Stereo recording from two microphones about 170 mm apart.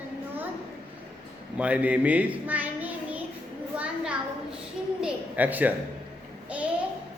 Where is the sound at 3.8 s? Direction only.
5° right (ahead or behind).